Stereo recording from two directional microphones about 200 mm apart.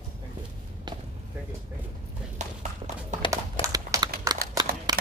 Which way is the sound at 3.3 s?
15° right (ahead or behind).